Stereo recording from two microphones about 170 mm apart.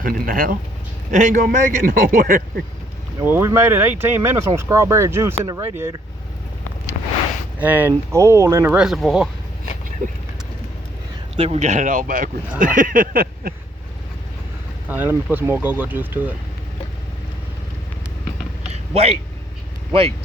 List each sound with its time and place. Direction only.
0.0 s speech: 55° right (ahead or behind)
3.2 s speech: 15° right (ahead or behind)
7.6 s speech: 10° right (ahead or behind)
10.0 s speech: 45° right (ahead or behind)
11.3 s speech: 35° right (ahead or behind); by 13.5 s 60° right (ahead or behind)
14.8 s speech: 10° right (ahead or behind)
18.7 s a sound: 35° right (ahead or behind)
19.9 s speech: 35° right (ahead or behind)